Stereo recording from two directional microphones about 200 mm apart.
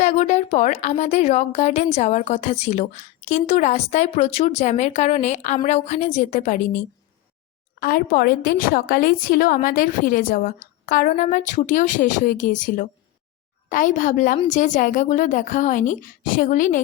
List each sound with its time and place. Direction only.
0.0 s a woman's voice: 35° left (ahead or behind)
7.8 s a woman's voice: 45° left (ahead or behind)